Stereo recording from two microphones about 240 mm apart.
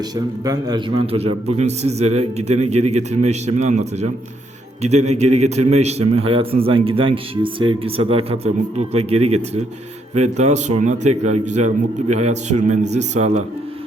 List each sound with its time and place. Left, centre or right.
0.4 s a man's voice: centre